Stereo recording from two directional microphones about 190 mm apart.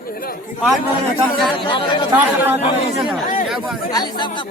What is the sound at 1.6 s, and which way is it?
Speech, 25° left (ahead or behind).